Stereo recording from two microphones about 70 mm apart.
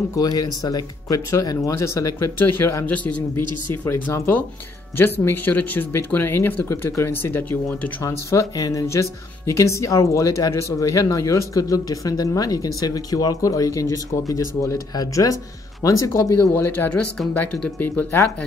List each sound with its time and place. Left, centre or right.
0.1 s speech: left
2.1 s speech: left
3.0 s speech: centre
4.9 s speech: left
6.7 s speech: left
8.0 s speech: left
8.8 s speech: left
16.1 s speech: left